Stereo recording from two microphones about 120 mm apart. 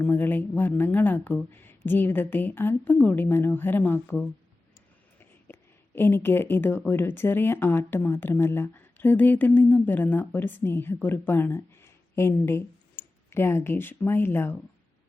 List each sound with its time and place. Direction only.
0.0 s speech: 15° left (ahead or behind)
5.5 s speech: 20° left (ahead or behind)